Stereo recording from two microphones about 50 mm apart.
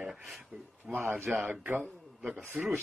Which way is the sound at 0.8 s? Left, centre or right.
Right.